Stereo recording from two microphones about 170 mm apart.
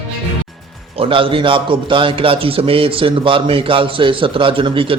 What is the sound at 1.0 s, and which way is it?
A man's voice, 30° right (ahead or behind).